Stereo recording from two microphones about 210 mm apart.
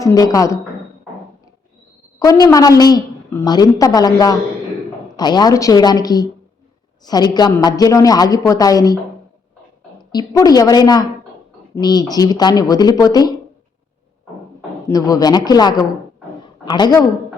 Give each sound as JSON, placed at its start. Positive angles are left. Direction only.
{"t": 0.0, "sound": "a woman's voice", "side_deg": 15}
{"t": 2.1, "sound": "a woman's voice", "side_deg": 15}
{"t": 10.1, "sound": "speech", "side_deg": 20}
{"t": 14.8, "sound": "a woman's voice", "side_deg": 15}